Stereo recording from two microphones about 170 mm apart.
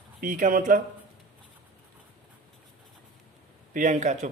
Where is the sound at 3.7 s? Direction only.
45° right (ahead or behind).